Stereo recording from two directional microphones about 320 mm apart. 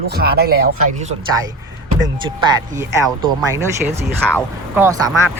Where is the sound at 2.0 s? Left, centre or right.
Centre.